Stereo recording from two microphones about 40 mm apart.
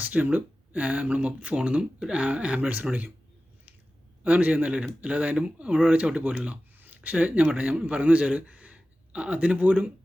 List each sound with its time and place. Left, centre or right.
0.0 s speech: right
2.2 s speech: right
4.2 s a man's voice: right
6.7 s a sound: right
7.1 s a man's voice: right
9.6 s a man's voice: right